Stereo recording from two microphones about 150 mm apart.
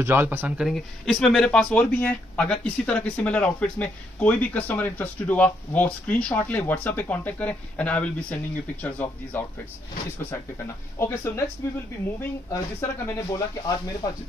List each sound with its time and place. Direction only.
0.0 s speech: 15° right (ahead or behind); by 9.4 s 10° left (ahead or behind)
11.0 s speech: 15° left (ahead or behind)
12.8 s speech: 20° left (ahead or behind)